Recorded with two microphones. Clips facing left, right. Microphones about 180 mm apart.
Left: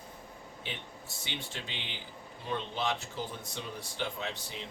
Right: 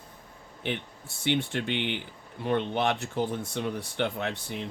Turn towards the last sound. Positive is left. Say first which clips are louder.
# right 7 dB
turn(degrees=-60)  # may be behind; listen again after turning